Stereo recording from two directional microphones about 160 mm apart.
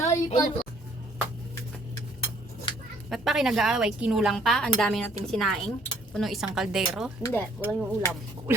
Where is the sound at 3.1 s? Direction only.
Centre (ahead or behind).